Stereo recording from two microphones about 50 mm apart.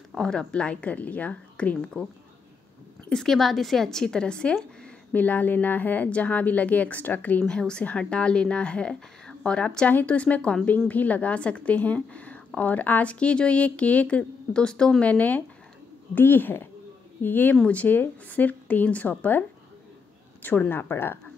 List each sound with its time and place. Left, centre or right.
0.1 s speech: centre
3.1 s a woman's voice: centre
5.1 s speech: left
6.0 s speech: left
7.4 s a woman's voice: centre
9.8 s speech: left
15.0 s speech: left
16.2 s speech: left
20.4 s speech: left
20.9 s speech: left